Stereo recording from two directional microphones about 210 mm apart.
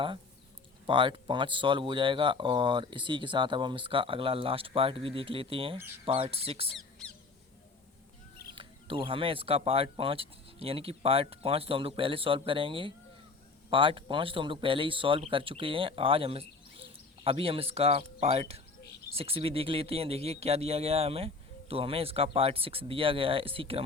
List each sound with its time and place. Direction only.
0.9 s speech: 25° right (ahead or behind)
8.5 s speech: 25° right (ahead or behind)